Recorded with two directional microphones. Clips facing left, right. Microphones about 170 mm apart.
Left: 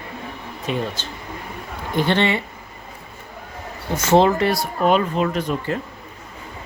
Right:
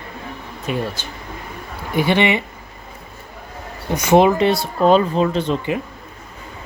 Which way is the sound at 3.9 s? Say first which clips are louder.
Right 2 dB; 15° right (ahead or behind).